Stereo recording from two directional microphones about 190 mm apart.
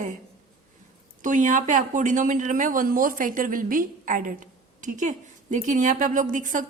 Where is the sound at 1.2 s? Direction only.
40° right (ahead or behind).